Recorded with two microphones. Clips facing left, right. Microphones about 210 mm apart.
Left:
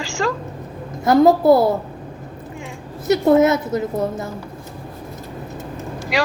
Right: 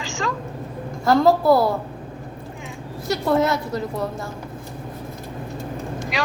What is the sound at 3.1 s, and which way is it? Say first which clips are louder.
A woman's voice: left 6 dB; 20° left (ahead or behind).